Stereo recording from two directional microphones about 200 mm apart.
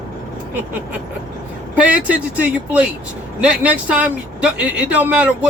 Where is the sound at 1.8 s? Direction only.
5° right (ahead or behind).